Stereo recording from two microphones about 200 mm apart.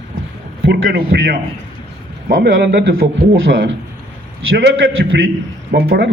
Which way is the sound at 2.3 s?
65° right (ahead or behind).